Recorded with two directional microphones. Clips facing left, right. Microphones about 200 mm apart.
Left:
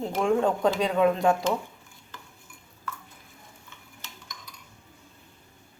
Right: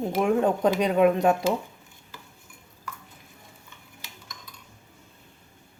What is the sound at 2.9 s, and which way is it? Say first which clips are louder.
Stir: left 2 dB; 10° right (ahead or behind).